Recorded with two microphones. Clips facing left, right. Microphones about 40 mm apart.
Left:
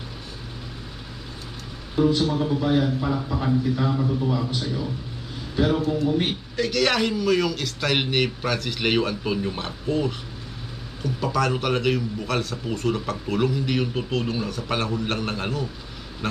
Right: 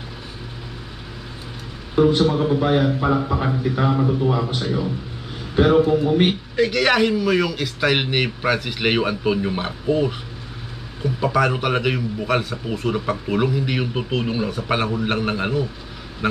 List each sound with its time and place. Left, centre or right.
2.0 s a man's voice: right; by 15.6 s centre